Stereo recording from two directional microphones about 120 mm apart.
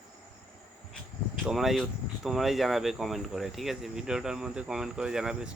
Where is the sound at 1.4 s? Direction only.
Centre (ahead or behind).